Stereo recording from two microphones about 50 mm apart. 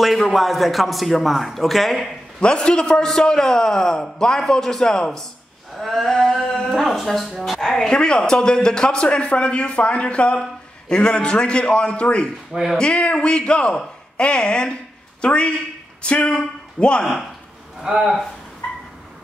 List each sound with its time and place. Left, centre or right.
0.0 s a man's voice: centre
2.4 s a man's voice: centre
7.7 s a man's voice: centre
17.8 s speech: centre